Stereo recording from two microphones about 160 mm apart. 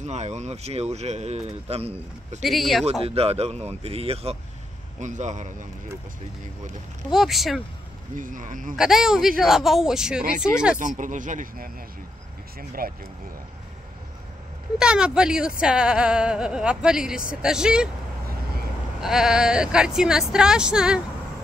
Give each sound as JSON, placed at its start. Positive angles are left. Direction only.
{"t": 0.0, "sound": "speech", "side_deg": -45}
{"t": 2.4, "sound": "speech", "side_deg": 0}
{"t": 2.8, "sound": "speech", "side_deg": -40}
{"t": 7.1, "sound": "speech", "side_deg": 0}
{"t": 8.2, "sound": "speech", "side_deg": -55}
{"t": 8.7, "sound": "speech", "side_deg": -5}
{"t": 10.8, "sound": "speech", "side_deg": -55}
{"t": 14.8, "sound": "speech", "side_deg": -5}
{"t": 18.9, "sound": "speech", "side_deg": -5}